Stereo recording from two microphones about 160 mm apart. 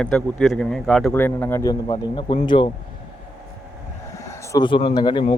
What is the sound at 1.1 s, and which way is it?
Speech, 15° left (ahead or behind).